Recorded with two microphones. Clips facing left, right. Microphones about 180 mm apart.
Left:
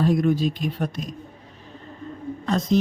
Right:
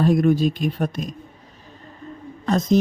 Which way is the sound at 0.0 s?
50° right (ahead or behind).